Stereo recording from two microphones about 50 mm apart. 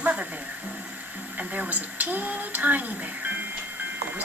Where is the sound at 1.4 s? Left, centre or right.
Right.